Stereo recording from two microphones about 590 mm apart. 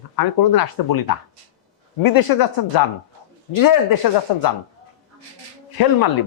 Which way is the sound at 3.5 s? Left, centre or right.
Left.